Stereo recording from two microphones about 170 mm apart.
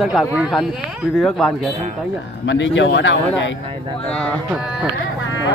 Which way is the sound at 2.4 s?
90° left.